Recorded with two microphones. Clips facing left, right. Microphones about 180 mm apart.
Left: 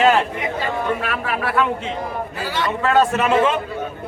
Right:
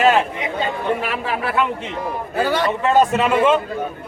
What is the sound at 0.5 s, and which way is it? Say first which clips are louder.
Speech: right 2 dB; 25° right (ahead or behind).